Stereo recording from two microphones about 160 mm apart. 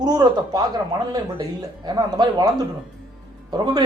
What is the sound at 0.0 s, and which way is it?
A man's voice, 25° right (ahead or behind).